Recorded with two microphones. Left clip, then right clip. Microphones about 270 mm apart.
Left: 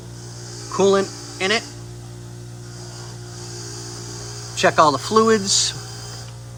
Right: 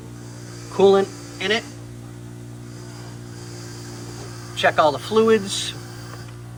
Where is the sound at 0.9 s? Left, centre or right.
Centre.